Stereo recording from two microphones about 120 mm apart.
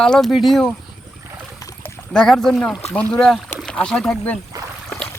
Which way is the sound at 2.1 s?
5° left (ahead or behind).